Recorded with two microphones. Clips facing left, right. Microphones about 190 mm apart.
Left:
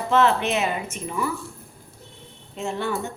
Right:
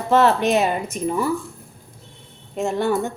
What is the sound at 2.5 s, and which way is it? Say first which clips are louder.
Speech: right 6 dB; 45° right (ahead or behind).